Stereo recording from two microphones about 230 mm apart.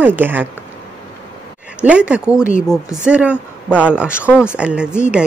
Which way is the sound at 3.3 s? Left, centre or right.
Centre.